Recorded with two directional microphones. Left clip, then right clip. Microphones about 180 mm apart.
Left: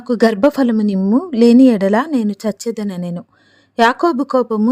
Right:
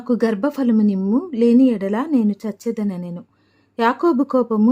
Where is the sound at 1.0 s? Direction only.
20° left (ahead or behind).